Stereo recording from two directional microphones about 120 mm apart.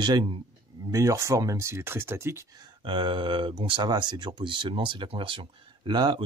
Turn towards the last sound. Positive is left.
turn(degrees=-35)  # may be behind; listen again after turning